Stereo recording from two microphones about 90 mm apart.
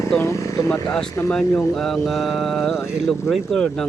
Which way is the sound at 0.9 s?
5° left (ahead or behind).